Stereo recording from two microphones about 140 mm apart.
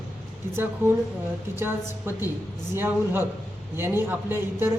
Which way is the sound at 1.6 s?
15° right (ahead or behind).